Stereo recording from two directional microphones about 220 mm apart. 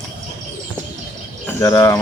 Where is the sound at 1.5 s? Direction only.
10° left (ahead or behind).